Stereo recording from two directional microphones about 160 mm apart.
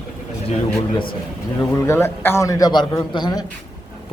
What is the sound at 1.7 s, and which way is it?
A man's voice, 15° left (ahead or behind).